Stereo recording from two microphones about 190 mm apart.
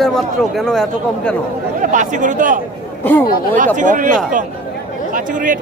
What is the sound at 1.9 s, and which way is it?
Speech, 40° right (ahead or behind).